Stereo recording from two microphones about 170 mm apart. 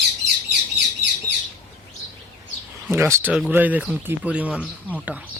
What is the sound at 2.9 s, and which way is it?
Speech, 15° right (ahead or behind).